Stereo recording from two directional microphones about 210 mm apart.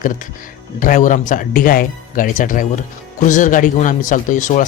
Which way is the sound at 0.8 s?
40° left (ahead or behind).